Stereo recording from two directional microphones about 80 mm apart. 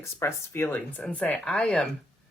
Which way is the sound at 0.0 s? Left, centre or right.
Left.